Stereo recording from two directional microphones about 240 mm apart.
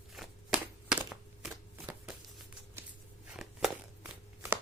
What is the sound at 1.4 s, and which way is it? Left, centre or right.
Shuffling cards, centre.